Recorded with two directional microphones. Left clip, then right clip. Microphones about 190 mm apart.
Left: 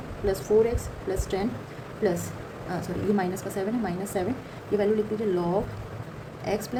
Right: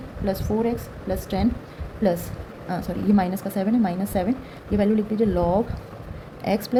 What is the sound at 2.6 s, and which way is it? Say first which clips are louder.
Speech: right 3 dB; 35° right (ahead or behind).